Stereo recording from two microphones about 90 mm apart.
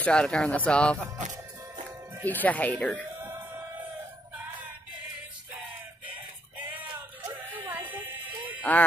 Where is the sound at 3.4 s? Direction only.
25° right (ahead or behind).